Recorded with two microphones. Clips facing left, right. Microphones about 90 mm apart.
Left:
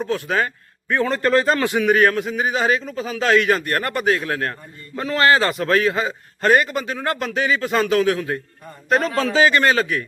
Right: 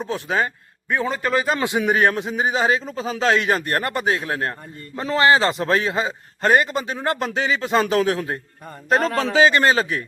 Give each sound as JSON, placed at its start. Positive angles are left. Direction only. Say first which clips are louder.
{"t": 0.0, "sound": "a man's voice", "louder": "left 1 dB", "side_deg": -20}
{"t": 1.5, "sound": "a man's voice", "louder": "left 3 dB", "side_deg": -20}
{"t": 7.8, "sound": "speech", "louder": "left 1 dB", "side_deg": -35}
{"t": 9.1, "sound": "a man's voice", "louder": "right 1 dB", "side_deg": -20}